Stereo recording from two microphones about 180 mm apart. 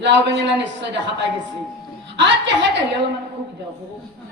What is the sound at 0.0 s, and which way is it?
A man's voice, 75° right (ahead or behind).